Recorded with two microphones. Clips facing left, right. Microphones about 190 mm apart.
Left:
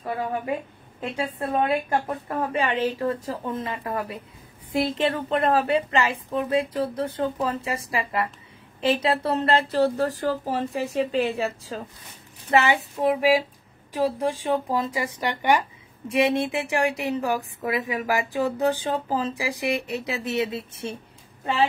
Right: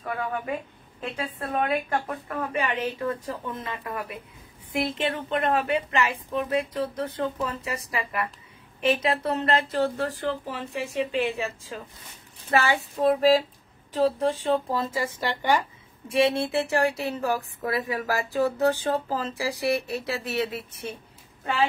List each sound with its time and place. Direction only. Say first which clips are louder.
0.0 s a woman's voice: left 2 dB; 30° left (ahead or behind)
12.4 s a woman's voice: left 3 dB; 20° left (ahead or behind)